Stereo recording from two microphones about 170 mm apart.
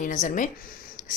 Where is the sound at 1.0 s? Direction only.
50° left (ahead or behind).